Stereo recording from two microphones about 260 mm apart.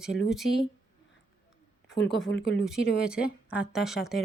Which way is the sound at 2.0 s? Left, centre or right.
Centre.